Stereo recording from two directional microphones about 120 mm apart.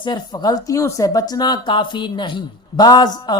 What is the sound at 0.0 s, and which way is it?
Speech, 35° left (ahead or behind).